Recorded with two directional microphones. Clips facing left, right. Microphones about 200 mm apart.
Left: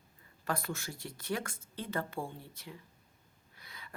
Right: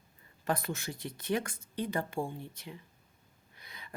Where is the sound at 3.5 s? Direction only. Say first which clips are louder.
Right 1 dB; 20° right (ahead or behind).